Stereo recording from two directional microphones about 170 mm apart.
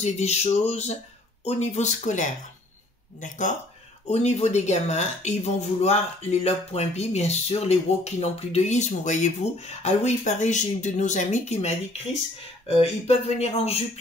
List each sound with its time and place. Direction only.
0.0 s speech: 40° left (ahead or behind)